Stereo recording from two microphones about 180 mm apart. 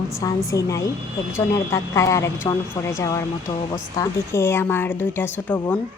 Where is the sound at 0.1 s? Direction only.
20° left (ahead or behind).